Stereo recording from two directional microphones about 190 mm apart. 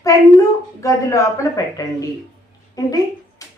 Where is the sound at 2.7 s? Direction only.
20° left (ahead or behind).